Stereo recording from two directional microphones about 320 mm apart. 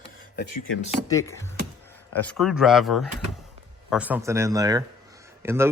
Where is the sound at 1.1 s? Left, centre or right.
Centre.